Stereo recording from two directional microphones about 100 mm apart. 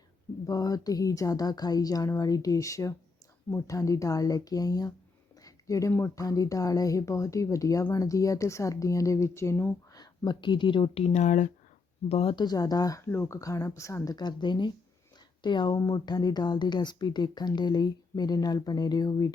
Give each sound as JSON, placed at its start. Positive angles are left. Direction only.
{"t": 0.4, "sound": "speech", "side_deg": 40}
{"t": 9.9, "sound": "speech", "side_deg": 45}
{"t": 12.4, "sound": "speech", "side_deg": 40}